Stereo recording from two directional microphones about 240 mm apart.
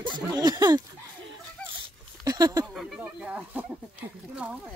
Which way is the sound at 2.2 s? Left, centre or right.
Centre.